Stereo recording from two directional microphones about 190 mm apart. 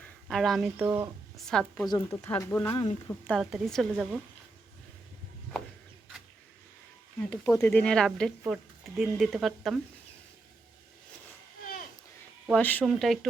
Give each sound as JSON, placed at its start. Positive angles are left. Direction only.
{"t": 0.3, "sound": "speech", "side_deg": 0}
{"t": 1.9, "sound": "speech", "side_deg": 15}
{"t": 2.7, "sound": "speech", "side_deg": 20}
{"t": 3.2, "sound": "speech", "side_deg": 0}
{"t": 7.4, "sound": "speech", "side_deg": 10}
{"t": 12.5, "sound": "speech", "side_deg": 5}